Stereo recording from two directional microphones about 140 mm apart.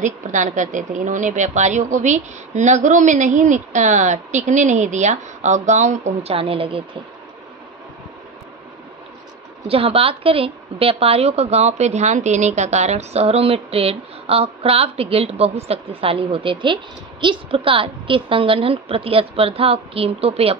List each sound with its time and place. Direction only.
0.0 s a woman's voice: 60° right (ahead or behind); by 6.8 s 40° right (ahead or behind)
9.7 s a woman's voice: 45° right (ahead or behind)